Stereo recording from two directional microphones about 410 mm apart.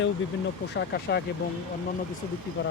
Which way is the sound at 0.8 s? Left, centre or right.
Left.